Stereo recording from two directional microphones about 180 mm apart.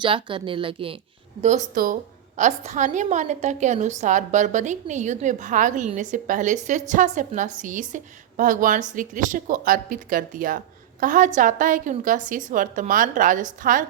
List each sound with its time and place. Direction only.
0.0 s speech: 30° right (ahead or behind)
1.4 s a woman's voice: 40° right (ahead or behind)